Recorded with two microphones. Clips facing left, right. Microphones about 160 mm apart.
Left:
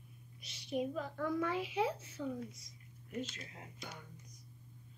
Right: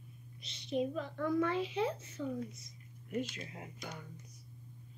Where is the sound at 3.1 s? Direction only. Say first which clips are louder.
Right 5 dB; 10° right (ahead or behind).